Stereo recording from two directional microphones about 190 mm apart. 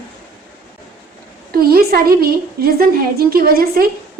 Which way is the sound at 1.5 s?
50° right (ahead or behind).